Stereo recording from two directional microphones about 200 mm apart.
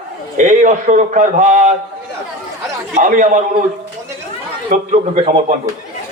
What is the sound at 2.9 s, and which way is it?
Speech, 40° right (ahead or behind).